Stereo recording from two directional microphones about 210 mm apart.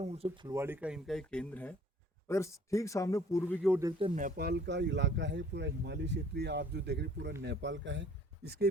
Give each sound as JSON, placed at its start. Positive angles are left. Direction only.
{"t": 0.0, "sound": "speech", "side_deg": -30}
{"t": 0.4, "sound": "speech", "side_deg": -15}
{"t": 3.8, "sound": "a man's voice", "side_deg": -20}